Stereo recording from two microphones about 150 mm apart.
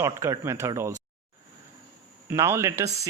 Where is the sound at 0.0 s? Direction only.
20° right (ahead or behind).